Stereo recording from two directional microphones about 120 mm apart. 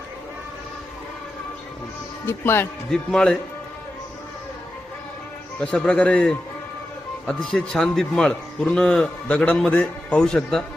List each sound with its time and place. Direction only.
2.2 s speech: 20° left (ahead or behind)
2.9 s a man's voice: 5° left (ahead or behind)
5.5 s a man's voice: 5° left (ahead or behind)